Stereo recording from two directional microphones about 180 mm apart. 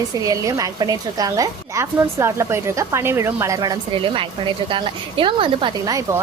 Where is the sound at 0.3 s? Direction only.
20° right (ahead or behind).